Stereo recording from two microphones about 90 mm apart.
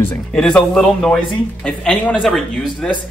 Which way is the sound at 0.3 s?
10° left (ahead or behind).